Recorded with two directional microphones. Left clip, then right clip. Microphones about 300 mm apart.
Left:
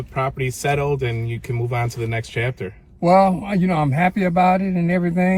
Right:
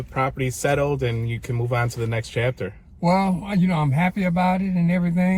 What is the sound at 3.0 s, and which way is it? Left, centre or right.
A man's voice, centre.